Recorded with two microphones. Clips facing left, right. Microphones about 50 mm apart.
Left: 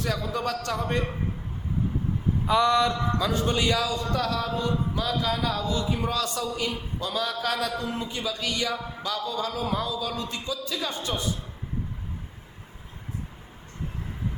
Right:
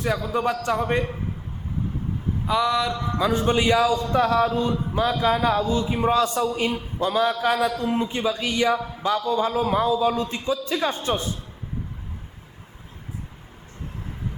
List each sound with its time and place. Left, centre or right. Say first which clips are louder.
0.0 s a man's voice: right 5 dB; centre
2.5 s speech: even; centre
3.2 s a man's voice: right 9 dB; right